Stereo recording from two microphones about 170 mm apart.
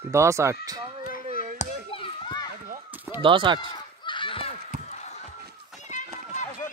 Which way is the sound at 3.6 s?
25° left (ahead or behind).